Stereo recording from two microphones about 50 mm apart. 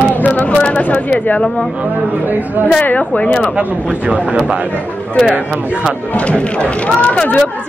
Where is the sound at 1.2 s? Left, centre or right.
Left.